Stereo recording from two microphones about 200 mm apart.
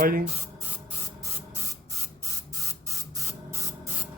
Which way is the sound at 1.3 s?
10° right (ahead or behind).